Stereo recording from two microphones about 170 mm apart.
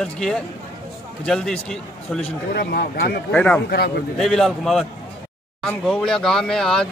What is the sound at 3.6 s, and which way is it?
Speech, 65° left (ahead or behind).